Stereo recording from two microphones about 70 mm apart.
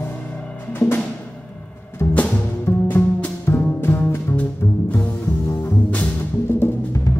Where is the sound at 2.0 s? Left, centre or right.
Left.